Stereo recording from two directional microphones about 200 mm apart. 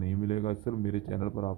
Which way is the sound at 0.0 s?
30° left (ahead or behind).